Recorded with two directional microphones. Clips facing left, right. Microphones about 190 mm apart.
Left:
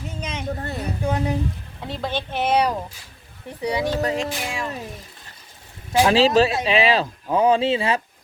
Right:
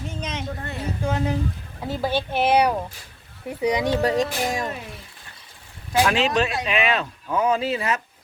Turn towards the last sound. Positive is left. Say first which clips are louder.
# left 4 dB
turn(degrees=30)  # may be behind; listen again after turning